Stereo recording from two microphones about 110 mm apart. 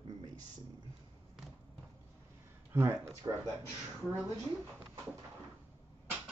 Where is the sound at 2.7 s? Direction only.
25° right (ahead or behind).